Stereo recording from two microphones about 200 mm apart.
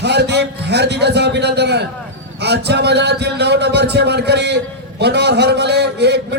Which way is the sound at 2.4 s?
55° right (ahead or behind).